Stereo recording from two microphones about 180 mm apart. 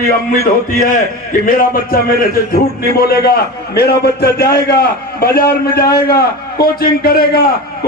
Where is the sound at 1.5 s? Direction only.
55° left (ahead or behind).